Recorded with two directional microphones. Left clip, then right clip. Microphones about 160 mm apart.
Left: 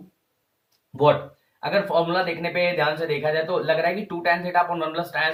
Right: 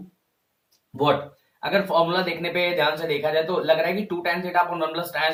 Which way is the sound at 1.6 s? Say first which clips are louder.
Right 1 dB; 15° right (ahead or behind).